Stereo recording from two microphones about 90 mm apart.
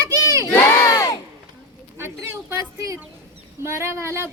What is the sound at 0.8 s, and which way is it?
Crowd, 40° left (ahead or behind).